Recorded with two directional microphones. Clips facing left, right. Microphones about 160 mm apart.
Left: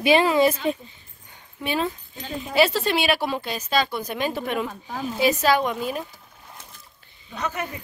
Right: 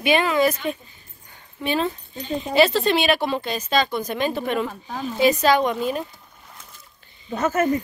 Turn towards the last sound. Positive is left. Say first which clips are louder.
# right 8 dB
turn(degrees=-45)  # may be behind; listen again after turning